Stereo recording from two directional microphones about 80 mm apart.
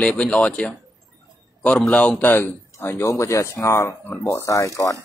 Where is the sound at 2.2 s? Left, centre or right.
Left.